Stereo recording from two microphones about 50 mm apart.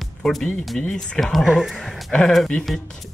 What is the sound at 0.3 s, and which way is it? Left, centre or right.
Speech, centre.